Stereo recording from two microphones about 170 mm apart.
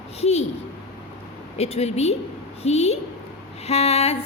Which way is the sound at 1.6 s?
40° left (ahead or behind).